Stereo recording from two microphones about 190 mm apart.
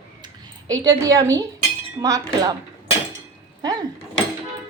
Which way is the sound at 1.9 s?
15° right (ahead or behind).